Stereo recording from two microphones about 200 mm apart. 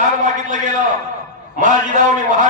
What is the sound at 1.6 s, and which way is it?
Speech, 40° right (ahead or behind).